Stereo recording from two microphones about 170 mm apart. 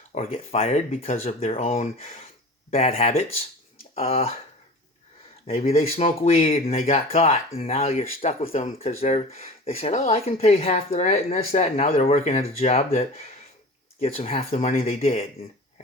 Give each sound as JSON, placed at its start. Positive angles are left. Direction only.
{"t": 0.1, "sound": "speech", "side_deg": 40}
{"t": 5.5, "sound": "speech", "side_deg": 40}